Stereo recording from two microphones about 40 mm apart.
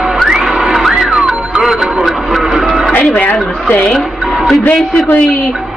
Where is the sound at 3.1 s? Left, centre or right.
Left.